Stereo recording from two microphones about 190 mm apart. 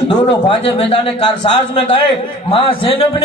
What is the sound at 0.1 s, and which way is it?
A man's voice, 30° left (ahead or behind).